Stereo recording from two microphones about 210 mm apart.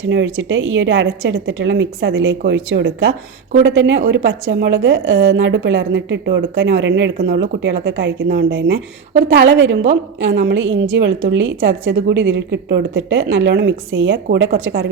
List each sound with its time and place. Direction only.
0.0 s a woman's voice: 65° right (ahead or behind)